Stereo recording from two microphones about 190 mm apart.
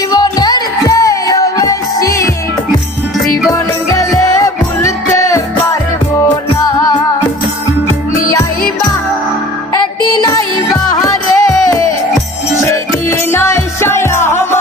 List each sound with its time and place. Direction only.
0.1 s music: 20° left (ahead or behind)
3.5 s music: 20° left (ahead or behind)
6.7 s music: 20° left (ahead or behind)
10.2 s music: 25° left (ahead or behind)